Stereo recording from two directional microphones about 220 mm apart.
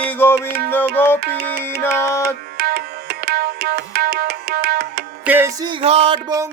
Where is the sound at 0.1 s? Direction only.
10° left (ahead or behind).